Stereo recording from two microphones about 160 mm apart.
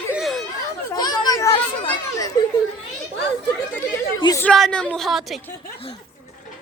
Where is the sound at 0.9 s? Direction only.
25° left (ahead or behind).